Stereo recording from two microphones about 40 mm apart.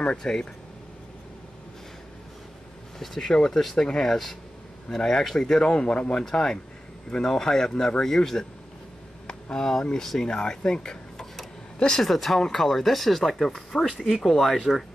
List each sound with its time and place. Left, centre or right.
0.0 s speech: left
3.0 s speech: centre
4.0 s speech: centre; by 6.1 s left
6.1 s speech: centre
12.0 s speech: centre